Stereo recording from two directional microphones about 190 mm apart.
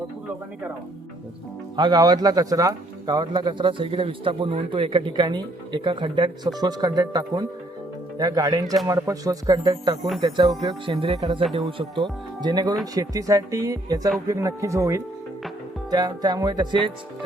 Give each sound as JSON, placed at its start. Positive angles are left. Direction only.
{"t": 1.7, "sound": "speech", "side_deg": -20}